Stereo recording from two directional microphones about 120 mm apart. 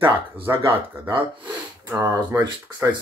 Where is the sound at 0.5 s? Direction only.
25° right (ahead or behind).